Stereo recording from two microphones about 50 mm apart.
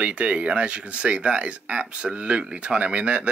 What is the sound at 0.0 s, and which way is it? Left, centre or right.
Speech, right.